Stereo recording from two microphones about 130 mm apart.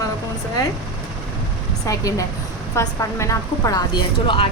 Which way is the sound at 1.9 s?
25° left (ahead or behind).